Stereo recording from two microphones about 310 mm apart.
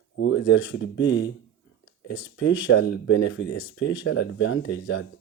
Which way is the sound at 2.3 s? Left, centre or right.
Left.